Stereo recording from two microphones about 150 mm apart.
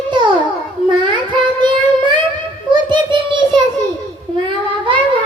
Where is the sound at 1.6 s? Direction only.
30° right (ahead or behind).